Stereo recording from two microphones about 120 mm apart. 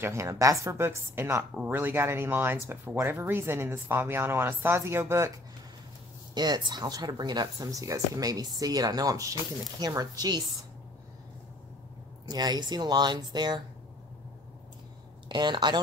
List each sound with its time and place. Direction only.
0.0 s speech: 25° right (ahead or behind)
6.3 s speech: 35° right (ahead or behind)
12.3 s speech: 35° right (ahead or behind)
15.2 s speech: 40° right (ahead or behind)